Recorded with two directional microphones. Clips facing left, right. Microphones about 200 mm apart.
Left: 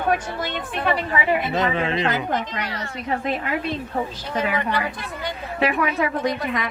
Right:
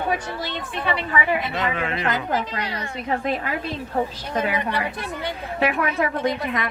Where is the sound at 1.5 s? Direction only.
30° left (ahead or behind).